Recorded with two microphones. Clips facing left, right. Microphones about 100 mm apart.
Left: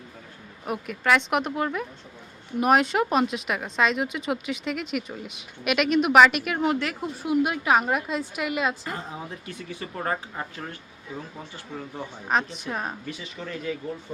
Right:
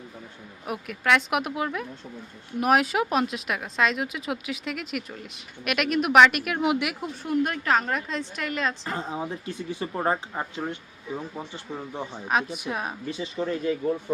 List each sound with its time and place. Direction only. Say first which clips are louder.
0.6 s speech: left 1 dB; centre (ahead or behind)
7.2 s a woman's voice: left 2 dB; 5° left (ahead or behind)
8.8 s speech: right 4 dB; 30° right (ahead or behind)
12.3 s speech: left 1 dB; 5° right (ahead or behind)
13.1 s speech: right 7 dB; 25° right (ahead or behind)